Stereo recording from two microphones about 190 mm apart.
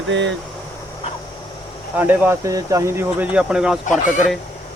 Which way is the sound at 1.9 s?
10° right (ahead or behind).